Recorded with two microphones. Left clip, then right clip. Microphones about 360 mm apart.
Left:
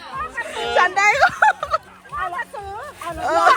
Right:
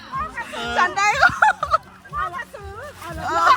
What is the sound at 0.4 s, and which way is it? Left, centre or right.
Children playing, centre.